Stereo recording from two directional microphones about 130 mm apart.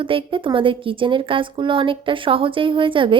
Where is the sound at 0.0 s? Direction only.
40° right (ahead or behind).